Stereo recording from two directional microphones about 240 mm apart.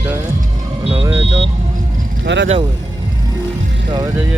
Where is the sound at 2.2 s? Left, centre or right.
Right.